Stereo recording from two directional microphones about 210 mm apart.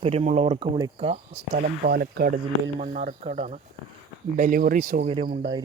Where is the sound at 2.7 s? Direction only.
35° right (ahead or behind).